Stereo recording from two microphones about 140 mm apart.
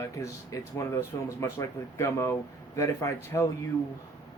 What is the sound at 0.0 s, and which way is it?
Speech, 20° left (ahead or behind).